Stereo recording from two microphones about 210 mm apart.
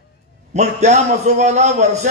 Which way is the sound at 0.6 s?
35° right (ahead or behind).